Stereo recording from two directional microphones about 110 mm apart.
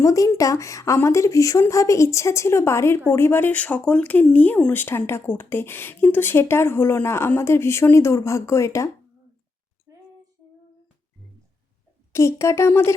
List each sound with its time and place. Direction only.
0.0 s speech: 30° left (ahead or behind)
12.1 s speech: 25° left (ahead or behind)